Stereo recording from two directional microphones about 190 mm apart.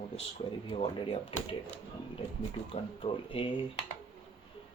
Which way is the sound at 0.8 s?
25° left (ahead or behind).